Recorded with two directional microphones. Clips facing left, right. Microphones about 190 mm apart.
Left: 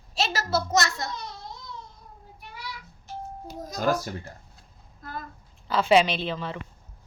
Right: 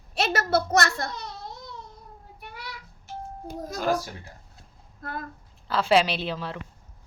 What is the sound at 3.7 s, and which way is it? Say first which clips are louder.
Speech: left 1 dB; 40° left (ahead or behind).